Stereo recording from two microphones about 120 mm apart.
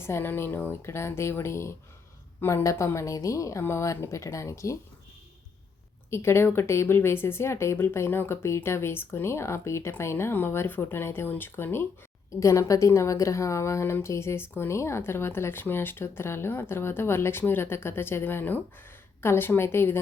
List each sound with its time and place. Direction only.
0.0 s a woman's voice: 20° left (ahead or behind)
6.1 s a woman's voice: 20° left (ahead or behind)